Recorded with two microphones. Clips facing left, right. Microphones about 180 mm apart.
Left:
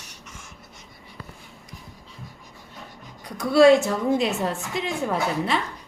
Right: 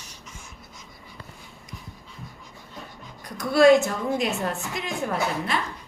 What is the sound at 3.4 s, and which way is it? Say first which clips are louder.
A woman's voice: left 1 dB; 30° left (ahead or behind).